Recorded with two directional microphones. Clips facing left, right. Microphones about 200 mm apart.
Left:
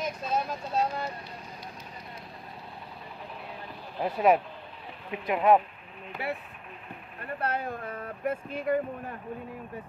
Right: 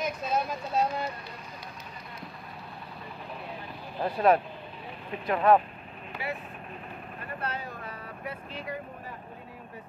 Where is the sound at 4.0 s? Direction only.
10° left (ahead or behind).